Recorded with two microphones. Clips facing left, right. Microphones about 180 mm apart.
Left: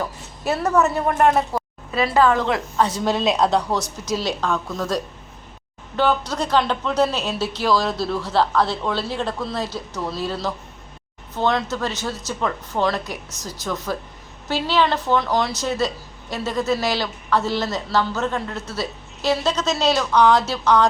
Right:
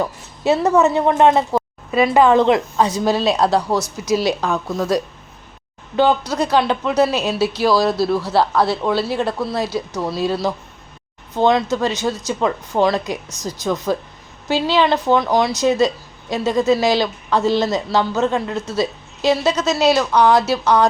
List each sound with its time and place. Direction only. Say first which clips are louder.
0.5 s a woman's voice: right 4 dB; 20° right (ahead or behind)